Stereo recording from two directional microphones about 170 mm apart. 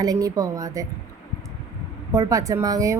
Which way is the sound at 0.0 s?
20° right (ahead or behind).